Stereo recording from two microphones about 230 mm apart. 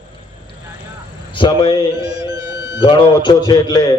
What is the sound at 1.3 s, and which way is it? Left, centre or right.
Speech, left.